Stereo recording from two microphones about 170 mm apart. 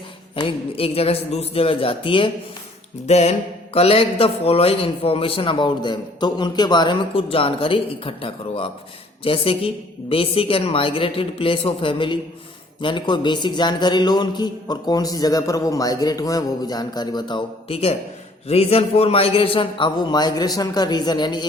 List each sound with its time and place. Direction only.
0.3 s a man's voice: 35° left (ahead or behind)